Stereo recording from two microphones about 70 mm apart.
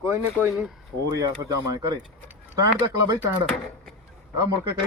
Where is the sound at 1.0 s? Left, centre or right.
Right.